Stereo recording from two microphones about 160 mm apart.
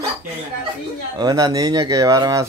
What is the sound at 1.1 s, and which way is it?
Speech, 25° right (ahead or behind).